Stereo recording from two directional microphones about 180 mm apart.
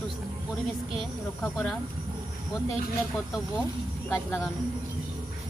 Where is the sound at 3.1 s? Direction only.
5° right (ahead or behind).